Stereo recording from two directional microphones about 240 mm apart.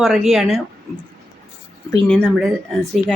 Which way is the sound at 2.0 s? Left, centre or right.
Centre.